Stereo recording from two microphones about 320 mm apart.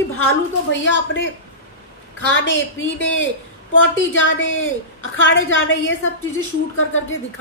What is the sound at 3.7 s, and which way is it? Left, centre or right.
A woman's voice, left.